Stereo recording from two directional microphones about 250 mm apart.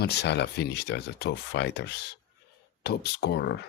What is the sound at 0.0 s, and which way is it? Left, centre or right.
Speech, left.